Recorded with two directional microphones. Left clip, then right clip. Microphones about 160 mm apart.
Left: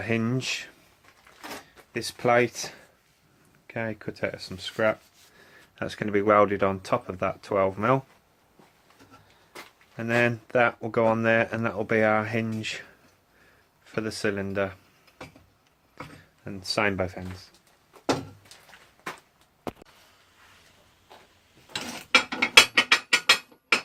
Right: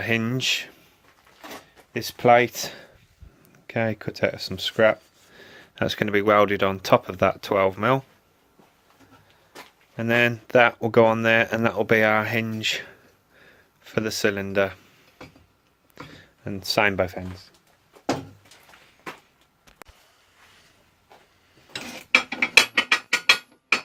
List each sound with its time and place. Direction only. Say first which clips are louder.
0.0 s speech: right 4 dB; 55° right (ahead or behind)
1.9 s speech: right 6 dB; 55° right (ahead or behind)
10.0 s speech: right 3 dB; 65° right (ahead or behind)
16.1 s speech: right 6 dB; 65° right (ahead or behind)
22.5 s mechanisms: left 1 dB; 20° right (ahead or behind)